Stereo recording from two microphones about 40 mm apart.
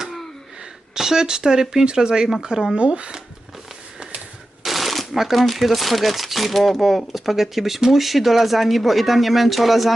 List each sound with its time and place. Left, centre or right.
0.9 s speech: centre; by 3.1 s right
4.6 s speech: centre